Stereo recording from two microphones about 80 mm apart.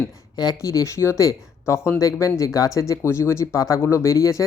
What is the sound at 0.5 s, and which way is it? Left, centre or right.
Speech, left.